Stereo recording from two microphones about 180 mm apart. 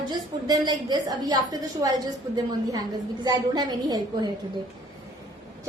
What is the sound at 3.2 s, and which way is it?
A woman's voice, 20° right (ahead or behind).